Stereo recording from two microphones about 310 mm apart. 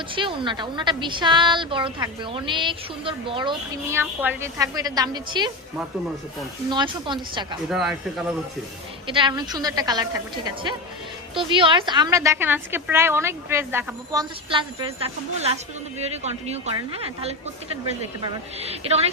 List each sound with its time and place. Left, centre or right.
0.1 s a woman's voice: centre
6.7 s a woman's voice: centre
7.7 s speech: centre
9.0 s a woman's voice: centre
11.3 s a woman's voice: centre
18.7 s speech: centre